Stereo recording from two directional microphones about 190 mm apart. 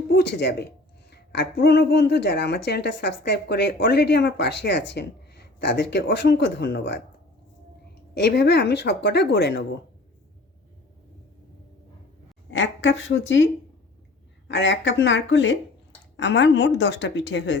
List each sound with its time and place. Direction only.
0.2 s a woman's voice: 60° left (ahead or behind)
8.1 s a woman's voice: 60° left (ahead or behind)
12.5 s a woman's voice: 80° left